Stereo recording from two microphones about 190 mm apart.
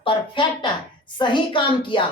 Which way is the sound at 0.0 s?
25° left (ahead or behind).